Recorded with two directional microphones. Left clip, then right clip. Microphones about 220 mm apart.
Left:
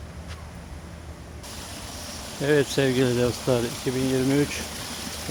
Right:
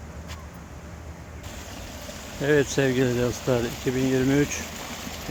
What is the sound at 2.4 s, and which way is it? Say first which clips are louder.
Speech: even; centre (ahead or behind).